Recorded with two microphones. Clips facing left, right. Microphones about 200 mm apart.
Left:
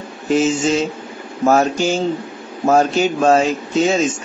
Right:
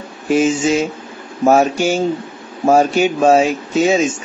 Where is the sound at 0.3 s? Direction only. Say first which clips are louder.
Right 2 dB; 10° right (ahead or behind).